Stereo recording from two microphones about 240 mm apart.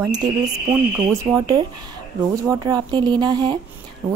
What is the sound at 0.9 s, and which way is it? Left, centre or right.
A woman's voice, centre.